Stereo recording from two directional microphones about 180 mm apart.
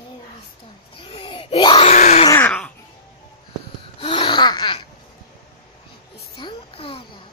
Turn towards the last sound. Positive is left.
turn(degrees=30)  # may be behind; listen again after turning